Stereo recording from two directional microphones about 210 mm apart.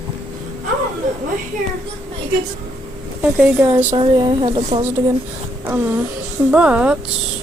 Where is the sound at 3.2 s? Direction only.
5° right (ahead or behind).